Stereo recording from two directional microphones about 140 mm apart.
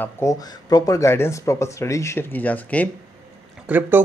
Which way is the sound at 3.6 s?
10° right (ahead or behind).